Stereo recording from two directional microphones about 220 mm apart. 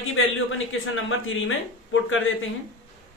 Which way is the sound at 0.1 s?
65° left (ahead or behind).